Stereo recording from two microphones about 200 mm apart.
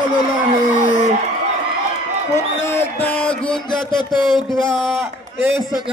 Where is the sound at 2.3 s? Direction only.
35° left (ahead or behind).